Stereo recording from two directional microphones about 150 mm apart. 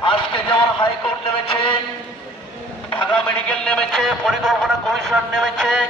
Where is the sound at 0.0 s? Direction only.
35° left (ahead or behind).